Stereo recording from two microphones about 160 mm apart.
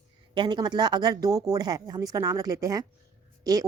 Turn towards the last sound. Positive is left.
turn(degrees=-20)  # may be behind; listen again after turning